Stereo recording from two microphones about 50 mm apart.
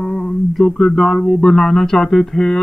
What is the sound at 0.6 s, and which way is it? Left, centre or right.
Speech, centre.